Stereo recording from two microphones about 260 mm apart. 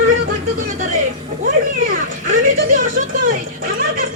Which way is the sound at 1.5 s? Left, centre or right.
Right.